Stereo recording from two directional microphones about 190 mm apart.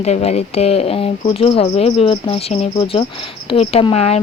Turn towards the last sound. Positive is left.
turn(degrees=35)  # may be behind; listen again after turning